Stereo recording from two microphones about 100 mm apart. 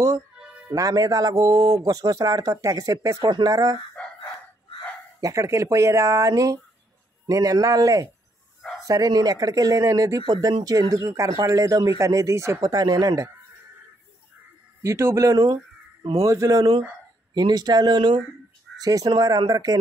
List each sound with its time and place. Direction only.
0.7 s a man's voice: 35° right (ahead or behind)
3.3 s speech: 45° right (ahead or behind)
5.2 s a man's voice: 30° right (ahead or behind)
14.8 s a man's voice: 30° right (ahead or behind)
16.0 s speech: 85° right
16.3 s a man's voice: 30° right (ahead or behind)
17.3 s speech: 45° right (ahead or behind)
18.8 s a man's voice: 40° right (ahead or behind)